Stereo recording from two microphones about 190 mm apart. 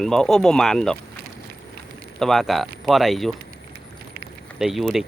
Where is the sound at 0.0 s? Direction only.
Centre (ahead or behind).